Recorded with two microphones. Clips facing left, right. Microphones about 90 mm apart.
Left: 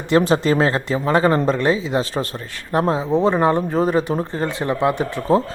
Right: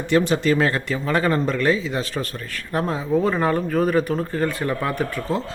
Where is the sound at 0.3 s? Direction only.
35° left (ahead or behind).